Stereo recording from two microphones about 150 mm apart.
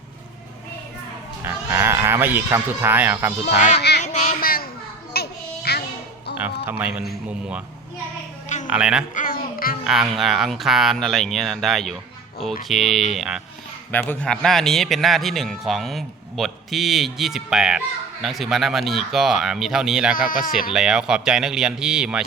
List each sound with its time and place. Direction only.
1.5 s speech: 15° right (ahead or behind)
3.8 s child singing: 90° left
4.0 s a sound: 50° left (ahead or behind)
4.4 s children playing: 80° left
5.1 s child singing: 90° left
6.7 s a man's voice: 10° right (ahead or behind)
8.4 s a sound: 55° left (ahead or behind)
8.7 s a man's voice: 5° right (ahead or behind)
9.1 s babbling: 70° left (ahead or behind)
9.8 s a man's voice: 5° right (ahead or behind)
13.9 s a man's voice: 10° left (ahead or behind)
20.1 s speech: 70° left (ahead or behind)
20.5 s a man's voice: 5° right (ahead or behind)